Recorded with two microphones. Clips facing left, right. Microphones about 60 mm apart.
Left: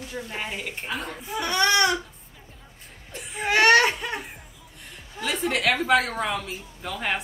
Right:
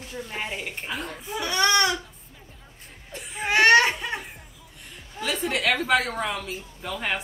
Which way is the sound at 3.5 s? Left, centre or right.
Right.